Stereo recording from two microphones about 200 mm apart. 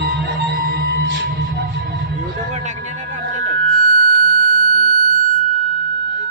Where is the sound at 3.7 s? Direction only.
45° right (ahead or behind).